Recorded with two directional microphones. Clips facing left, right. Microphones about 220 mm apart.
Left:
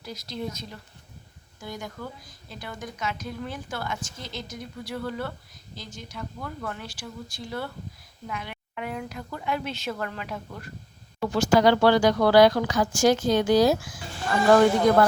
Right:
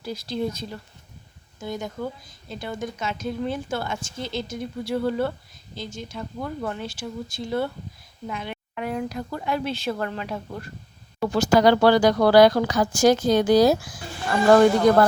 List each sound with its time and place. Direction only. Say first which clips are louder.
0.0 s speech: right 6 dB; 30° right (ahead or behind)
8.7 s speech: right 5 dB; 40° right (ahead or behind)